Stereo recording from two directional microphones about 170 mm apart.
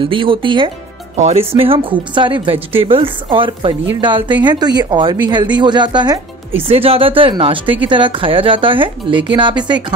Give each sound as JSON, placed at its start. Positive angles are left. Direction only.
{"t": 0.0, "sound": "speech", "side_deg": -30}